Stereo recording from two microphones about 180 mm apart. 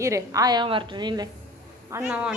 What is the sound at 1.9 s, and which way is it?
Speech, 10° right (ahead or behind).